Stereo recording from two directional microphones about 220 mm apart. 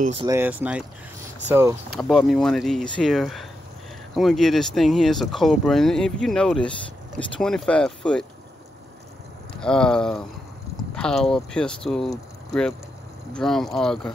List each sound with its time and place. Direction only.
0.0 s speech: 25° right (ahead or behind)
0.3 s speech: 10° right (ahead or behind)
2.0 s speech: centre (ahead or behind)
9.6 s speech: 5° left (ahead or behind)